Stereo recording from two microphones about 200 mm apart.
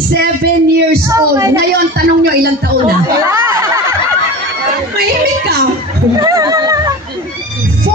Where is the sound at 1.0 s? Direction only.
15° right (ahead or behind).